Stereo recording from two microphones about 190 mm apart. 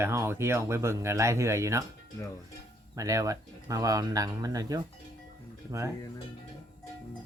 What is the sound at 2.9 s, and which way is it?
Speech, 20° right (ahead or behind).